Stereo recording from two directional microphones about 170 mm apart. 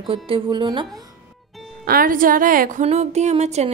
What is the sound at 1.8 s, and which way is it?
A woman's voice, 60° right (ahead or behind).